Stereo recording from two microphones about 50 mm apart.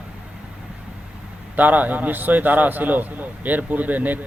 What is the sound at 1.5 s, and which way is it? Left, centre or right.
A man's voice, right.